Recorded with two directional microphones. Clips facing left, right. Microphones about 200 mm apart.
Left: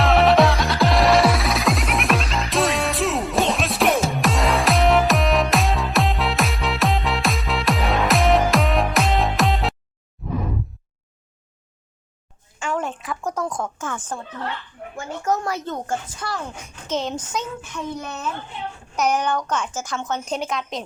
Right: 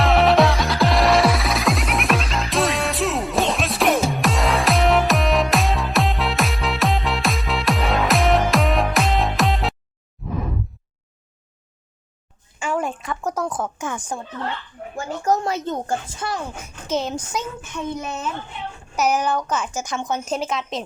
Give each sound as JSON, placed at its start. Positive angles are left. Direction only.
{"t": 0.0, "sound": "music", "side_deg": 0}
{"t": 10.2, "sound": "a sound", "side_deg": 0}
{"t": 12.5, "sound": "a sound", "side_deg": -10}
{"t": 13.7, "sound": "speech", "side_deg": -15}
{"t": 14.9, "sound": "speech", "side_deg": -35}
{"t": 15.4, "sound": "a woman's voice", "side_deg": -20}
{"t": 16.6, "sound": "speech", "side_deg": -10}
{"t": 17.7, "sound": "a woman's voice", "side_deg": -25}
{"t": 18.9, "sound": "speech", "side_deg": -5}
{"t": 19.7, "sound": "speech", "side_deg": -15}